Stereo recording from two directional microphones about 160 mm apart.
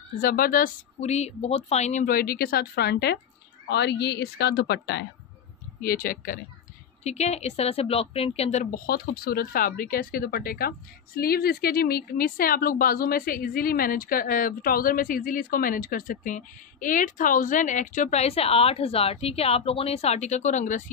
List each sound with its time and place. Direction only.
0.2 s a woman's voice: 65° left (ahead or behind)
1.0 s a woman's voice: 45° left (ahead or behind); by 5.0 s 90° left
5.8 s a woman's voice: 65° left (ahead or behind)
7.0 s a woman's voice: 45° left (ahead or behind)
8.7 s a woman's voice: 65° left (ahead or behind); by 20.8 s 50° left (ahead or behind)